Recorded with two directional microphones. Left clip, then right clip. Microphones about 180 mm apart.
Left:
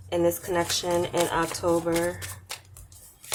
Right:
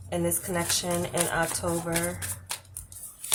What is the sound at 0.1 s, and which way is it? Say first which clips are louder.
Speech: left 5 dB; 35° left (ahead or behind).